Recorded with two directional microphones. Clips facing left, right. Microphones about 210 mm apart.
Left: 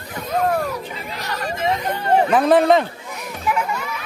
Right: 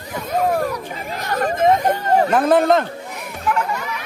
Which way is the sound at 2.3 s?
Centre (ahead or behind).